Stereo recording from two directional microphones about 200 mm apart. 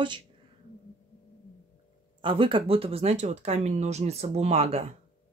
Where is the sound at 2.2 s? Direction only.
25° right (ahead or behind).